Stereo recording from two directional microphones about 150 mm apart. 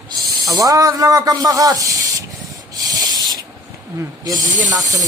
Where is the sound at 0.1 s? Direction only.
25° right (ahead or behind).